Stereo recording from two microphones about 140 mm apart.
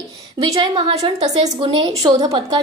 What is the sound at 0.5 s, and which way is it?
A woman's voice, 35° right (ahead or behind).